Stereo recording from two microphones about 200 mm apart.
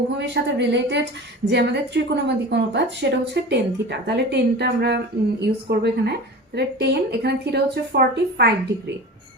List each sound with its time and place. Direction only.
0.2 s a woman's voice: 60° right (ahead or behind)